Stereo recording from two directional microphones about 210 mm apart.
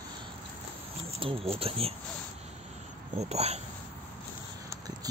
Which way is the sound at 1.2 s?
25° right (ahead or behind).